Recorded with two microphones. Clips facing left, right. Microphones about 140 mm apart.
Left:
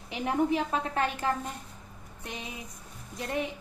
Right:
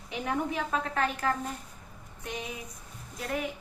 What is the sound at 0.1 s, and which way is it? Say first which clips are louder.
A woman's voice: left 4 dB; 30° left (ahead or behind).